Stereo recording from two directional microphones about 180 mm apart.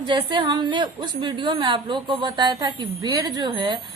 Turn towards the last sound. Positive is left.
turn(degrees=-25)  # may be behind; listen again after turning